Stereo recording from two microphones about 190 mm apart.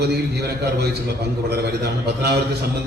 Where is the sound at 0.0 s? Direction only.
60° right (ahead or behind).